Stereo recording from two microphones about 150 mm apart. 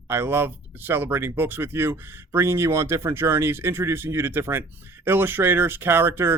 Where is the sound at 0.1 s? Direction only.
15° right (ahead or behind).